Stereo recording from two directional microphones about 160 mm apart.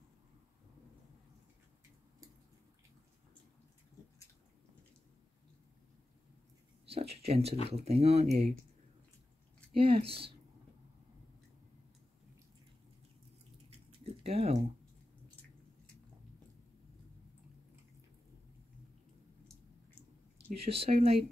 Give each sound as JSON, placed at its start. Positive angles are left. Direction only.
{"t": 6.9, "sound": "speech", "side_deg": -40}
{"t": 9.8, "sound": "speech", "side_deg": -35}
{"t": 13.7, "sound": "a sound", "side_deg": -40}
{"t": 20.5, "sound": "speech", "side_deg": -40}